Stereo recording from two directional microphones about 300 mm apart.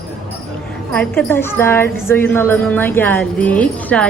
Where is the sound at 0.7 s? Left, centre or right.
Centre.